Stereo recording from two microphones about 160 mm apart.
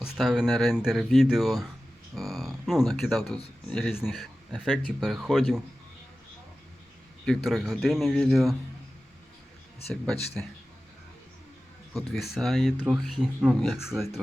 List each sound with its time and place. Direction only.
0.0 s speech: 5° right (ahead or behind)
7.3 s speech: centre (ahead or behind)
9.9 s speech: 5° left (ahead or behind)
11.9 s speech: centre (ahead or behind)